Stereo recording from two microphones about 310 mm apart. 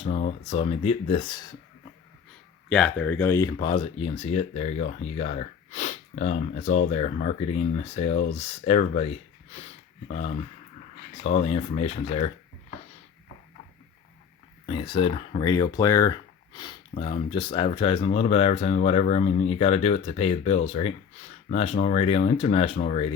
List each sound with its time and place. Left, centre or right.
0.0 s speech: left
2.6 s speech: centre
14.7 s speech: centre